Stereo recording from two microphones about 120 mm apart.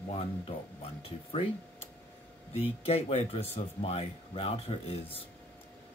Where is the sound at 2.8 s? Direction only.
55° left (ahead or behind).